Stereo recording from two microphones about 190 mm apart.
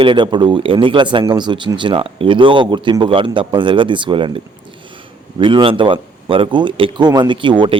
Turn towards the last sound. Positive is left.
turn(degrees=-25)  # may be behind; listen again after turning